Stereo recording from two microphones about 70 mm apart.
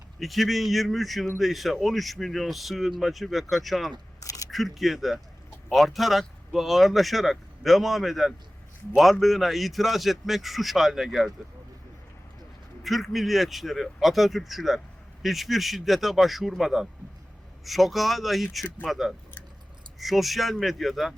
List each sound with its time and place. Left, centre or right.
0.2 s speech: centre
4.2 s single-lens reflex camera: left
4.5 s speech: centre
12.8 s speech: centre